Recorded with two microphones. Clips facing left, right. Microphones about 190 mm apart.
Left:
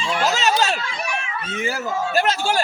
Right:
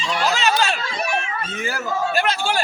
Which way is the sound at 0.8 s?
40° right (ahead or behind).